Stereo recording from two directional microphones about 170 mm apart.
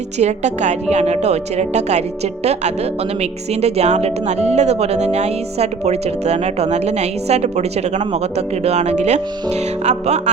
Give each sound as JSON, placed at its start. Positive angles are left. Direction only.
{"t": 0.2, "sound": "speech", "side_deg": -40}